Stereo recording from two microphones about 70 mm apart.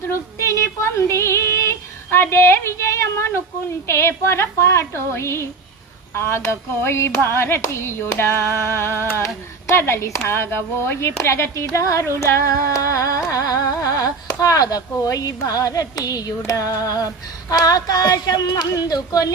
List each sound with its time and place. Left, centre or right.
0.1 s female singing: left
3.8 s speech: left
12.2 s music: left
17.5 s female singing: left